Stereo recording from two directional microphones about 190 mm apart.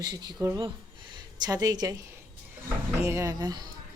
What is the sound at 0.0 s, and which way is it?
Speech, 20° right (ahead or behind).